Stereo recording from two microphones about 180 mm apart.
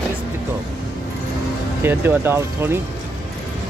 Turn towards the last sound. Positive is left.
turn(degrees=-15)  # may be behind; listen again after turning